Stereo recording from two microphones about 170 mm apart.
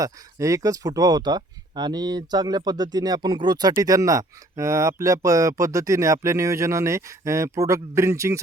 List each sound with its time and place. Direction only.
0.0 s speech: 20° right (ahead or behind)